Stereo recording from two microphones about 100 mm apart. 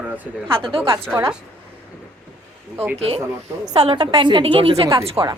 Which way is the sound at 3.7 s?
85° right.